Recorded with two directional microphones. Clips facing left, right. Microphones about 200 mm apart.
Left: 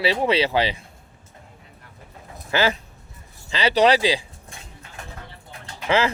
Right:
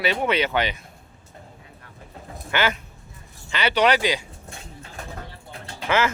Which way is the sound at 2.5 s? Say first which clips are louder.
Left 3 dB; 30° left (ahead or behind).